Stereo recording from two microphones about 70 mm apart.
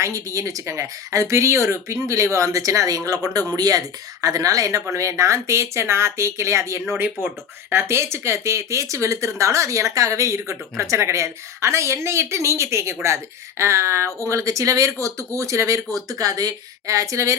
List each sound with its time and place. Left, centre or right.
0.0 s speech: right
7.0 s speech: right